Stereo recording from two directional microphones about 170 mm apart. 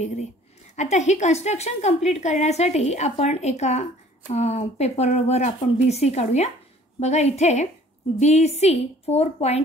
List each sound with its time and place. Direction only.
0.7 s a woman's voice: 40° left (ahead or behind)